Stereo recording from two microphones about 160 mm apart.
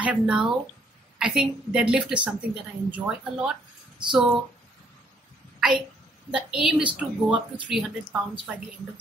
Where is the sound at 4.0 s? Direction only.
30° right (ahead or behind).